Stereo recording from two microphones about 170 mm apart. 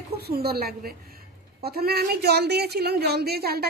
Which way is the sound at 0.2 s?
65° right (ahead or behind).